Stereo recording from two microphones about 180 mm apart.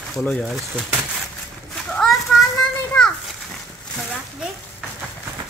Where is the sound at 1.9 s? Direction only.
Centre (ahead or behind).